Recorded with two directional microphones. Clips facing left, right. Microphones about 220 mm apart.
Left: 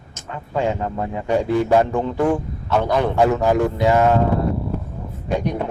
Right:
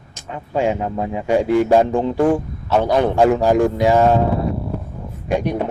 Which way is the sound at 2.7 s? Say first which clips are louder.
Right 3 dB; 30° right (ahead or behind).